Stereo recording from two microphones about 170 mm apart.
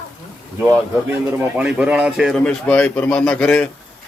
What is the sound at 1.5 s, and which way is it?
A man's voice, 5° right (ahead or behind).